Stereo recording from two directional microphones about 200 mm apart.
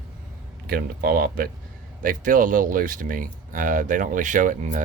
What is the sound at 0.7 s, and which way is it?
Speech, 50° right (ahead or behind).